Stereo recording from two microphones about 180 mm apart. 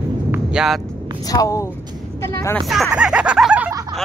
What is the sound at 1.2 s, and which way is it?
Speech, 20° left (ahead or behind).